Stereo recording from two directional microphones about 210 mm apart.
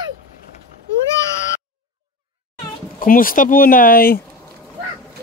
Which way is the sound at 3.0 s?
40° left (ahead or behind).